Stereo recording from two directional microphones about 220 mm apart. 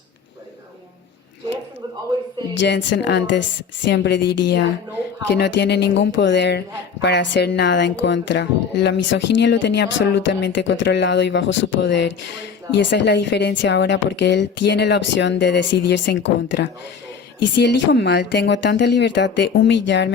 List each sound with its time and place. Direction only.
2.6 s speech: 50° left (ahead or behind)
17.9 s speech: 50° left (ahead or behind)